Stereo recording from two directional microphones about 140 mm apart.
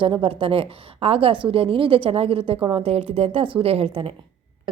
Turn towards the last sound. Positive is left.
turn(degrees=-45)  # may be behind; listen again after turning